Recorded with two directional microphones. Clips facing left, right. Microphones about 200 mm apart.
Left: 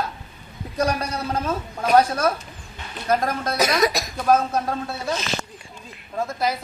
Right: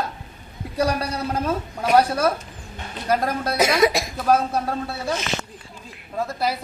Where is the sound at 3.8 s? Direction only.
25° right (ahead or behind).